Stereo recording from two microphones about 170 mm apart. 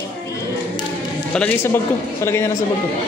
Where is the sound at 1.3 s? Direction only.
5° left (ahead or behind).